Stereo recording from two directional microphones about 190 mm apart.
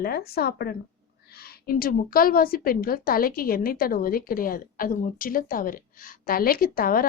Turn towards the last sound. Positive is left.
turn(degrees=50)  # may be behind; listen again after turning